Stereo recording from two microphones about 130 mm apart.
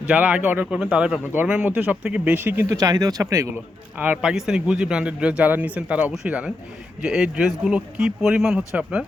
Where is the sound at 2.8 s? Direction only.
30° right (ahead or behind).